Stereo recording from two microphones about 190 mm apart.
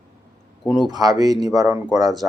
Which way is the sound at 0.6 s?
Centre (ahead or behind).